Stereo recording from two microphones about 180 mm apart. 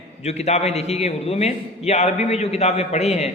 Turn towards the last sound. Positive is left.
turn(degrees=35)  # may be behind; listen again after turning